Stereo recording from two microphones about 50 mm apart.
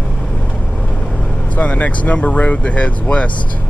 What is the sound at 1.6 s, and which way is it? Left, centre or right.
Speech, left.